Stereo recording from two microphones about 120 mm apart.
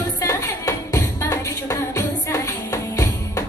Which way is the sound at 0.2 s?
25° left (ahead or behind).